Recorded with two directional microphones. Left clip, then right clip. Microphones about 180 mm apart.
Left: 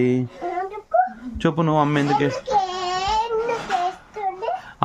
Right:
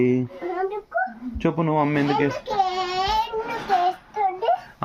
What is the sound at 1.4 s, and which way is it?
Speech, 35° left (ahead or behind).